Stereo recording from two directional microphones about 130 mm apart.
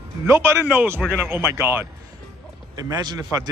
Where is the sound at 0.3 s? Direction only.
20° right (ahead or behind).